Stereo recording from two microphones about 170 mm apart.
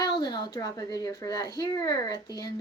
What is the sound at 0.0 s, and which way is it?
Speech, 25° left (ahead or behind).